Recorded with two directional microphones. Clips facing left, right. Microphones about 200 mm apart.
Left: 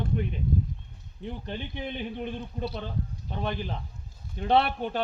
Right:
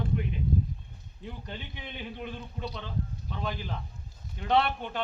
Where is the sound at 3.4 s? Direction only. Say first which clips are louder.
Left 4 dB; 30° left (ahead or behind).